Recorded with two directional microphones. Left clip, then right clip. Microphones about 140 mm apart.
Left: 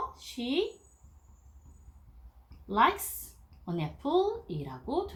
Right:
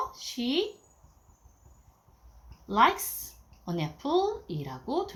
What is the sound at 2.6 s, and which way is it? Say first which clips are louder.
Speech: right 2 dB; 35° right (ahead or behind).